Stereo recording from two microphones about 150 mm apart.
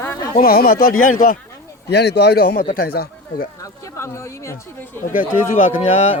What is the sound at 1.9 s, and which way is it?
A man's voice, 90° left.